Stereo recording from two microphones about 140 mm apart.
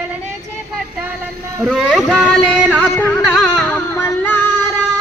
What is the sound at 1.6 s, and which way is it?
Speech, 5° right (ahead or behind).